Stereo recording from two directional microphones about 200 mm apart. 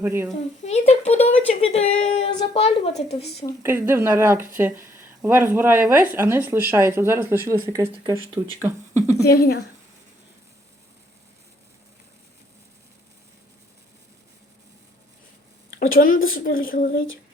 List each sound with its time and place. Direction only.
0.0 s speech: 10° right (ahead or behind)
0.6 s speech: 35° left (ahead or behind)
3.2 s speech: 55° left (ahead or behind)
3.6 s speech: 10° right (ahead or behind)
9.2 s speech: 50° left (ahead or behind)
15.9 s speech: 45° left (ahead or behind)